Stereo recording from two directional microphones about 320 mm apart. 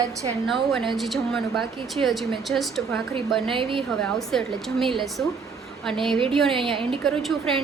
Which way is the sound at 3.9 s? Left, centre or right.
Centre.